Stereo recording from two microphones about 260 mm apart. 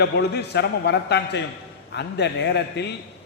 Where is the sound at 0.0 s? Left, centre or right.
Left.